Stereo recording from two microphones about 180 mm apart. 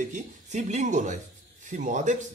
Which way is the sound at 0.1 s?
40° right (ahead or behind).